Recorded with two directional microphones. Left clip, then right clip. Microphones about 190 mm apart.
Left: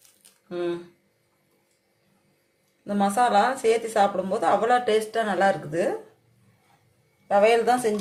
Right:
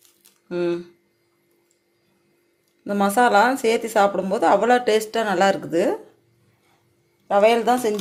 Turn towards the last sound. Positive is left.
turn(degrees=-30)  # may be behind; listen again after turning